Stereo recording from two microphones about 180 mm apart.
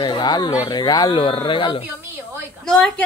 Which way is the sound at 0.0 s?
25° left (ahead or behind).